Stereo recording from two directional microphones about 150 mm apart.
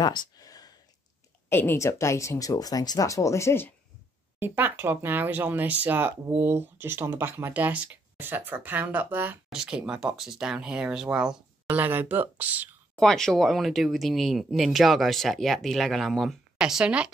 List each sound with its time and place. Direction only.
0.0 s a sound: 30° left (ahead or behind)
1.5 s speech: 15° left (ahead or behind)
4.4 s speech: 15° right (ahead or behind)
12.9 s speech: 5° left (ahead or behind)